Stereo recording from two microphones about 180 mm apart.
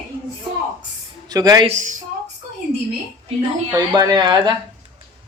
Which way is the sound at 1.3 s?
20° right (ahead or behind).